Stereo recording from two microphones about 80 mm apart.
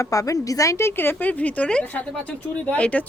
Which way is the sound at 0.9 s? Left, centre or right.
Left.